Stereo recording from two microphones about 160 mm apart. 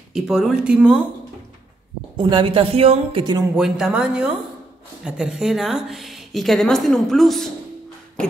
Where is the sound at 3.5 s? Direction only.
5° right (ahead or behind).